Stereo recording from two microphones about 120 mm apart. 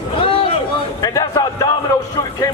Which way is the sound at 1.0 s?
30° left (ahead or behind).